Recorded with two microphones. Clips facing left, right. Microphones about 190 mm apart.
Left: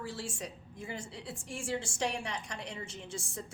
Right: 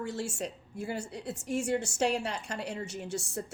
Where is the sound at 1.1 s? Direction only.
45° right (ahead or behind).